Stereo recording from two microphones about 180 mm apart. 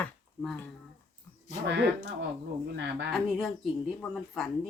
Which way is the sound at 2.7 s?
70° right (ahead or behind).